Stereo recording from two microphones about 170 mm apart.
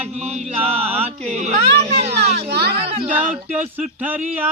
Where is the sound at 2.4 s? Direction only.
70° right (ahead or behind).